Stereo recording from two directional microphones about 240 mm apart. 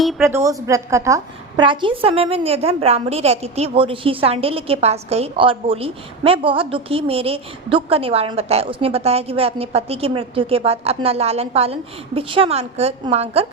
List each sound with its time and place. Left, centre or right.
0.0 s a woman's voice: centre
0.3 s a woman's voice: centre